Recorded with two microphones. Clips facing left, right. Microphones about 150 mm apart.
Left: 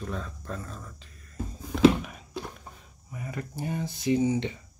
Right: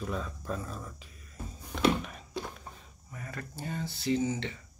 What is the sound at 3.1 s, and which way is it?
Speech, 15° left (ahead or behind).